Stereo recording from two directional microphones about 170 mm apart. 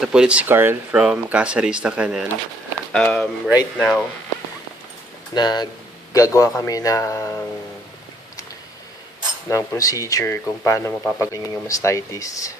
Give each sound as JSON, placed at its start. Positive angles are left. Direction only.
{"t": 0.0, "sound": "speech", "side_deg": -5}
{"t": 2.9, "sound": "speech", "side_deg": 5}
{"t": 5.3, "sound": "speech", "side_deg": 25}
{"t": 9.5, "sound": "speech", "side_deg": 20}